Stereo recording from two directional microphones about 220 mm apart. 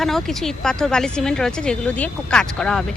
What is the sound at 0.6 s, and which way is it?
Speech, 5° left (ahead or behind).